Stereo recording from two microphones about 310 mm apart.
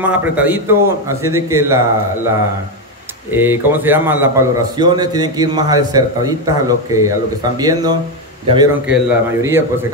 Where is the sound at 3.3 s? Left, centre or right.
Centre.